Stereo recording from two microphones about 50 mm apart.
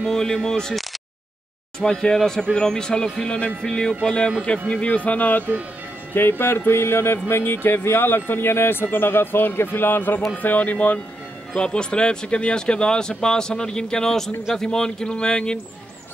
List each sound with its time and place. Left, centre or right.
0.0 s speech: centre
1.8 s speech: centre; by 5.4 s left
6.1 s speech: left
11.5 s speech: left